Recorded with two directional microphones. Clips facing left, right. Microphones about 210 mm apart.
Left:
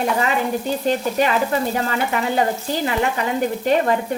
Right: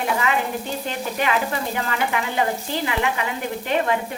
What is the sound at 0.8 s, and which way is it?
A woman's voice, 40° left (ahead or behind).